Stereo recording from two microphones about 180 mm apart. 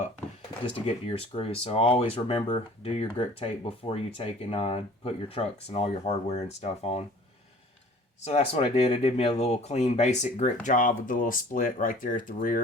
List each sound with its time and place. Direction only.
0.6 s speech: 30° left (ahead or behind)
8.2 s speech: 35° left (ahead or behind)